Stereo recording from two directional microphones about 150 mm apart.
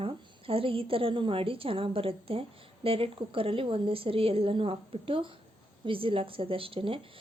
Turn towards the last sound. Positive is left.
turn(degrees=-35)  # may be behind; listen again after turning